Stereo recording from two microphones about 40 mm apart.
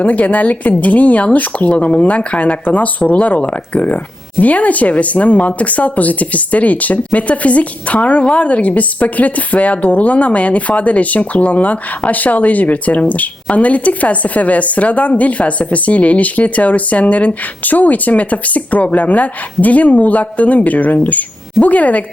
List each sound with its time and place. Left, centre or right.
0.0 s speech: left